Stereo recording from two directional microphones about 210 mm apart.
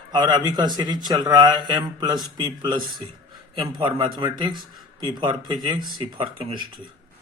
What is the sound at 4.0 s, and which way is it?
A man's voice, 20° right (ahead or behind).